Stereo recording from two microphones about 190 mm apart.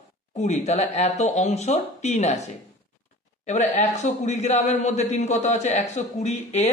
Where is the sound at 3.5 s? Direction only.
35° left (ahead or behind).